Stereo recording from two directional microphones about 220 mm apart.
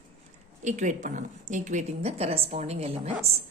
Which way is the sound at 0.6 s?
35° right (ahead or behind).